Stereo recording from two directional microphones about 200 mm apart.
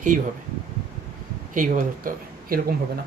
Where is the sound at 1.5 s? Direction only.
45° right (ahead or behind).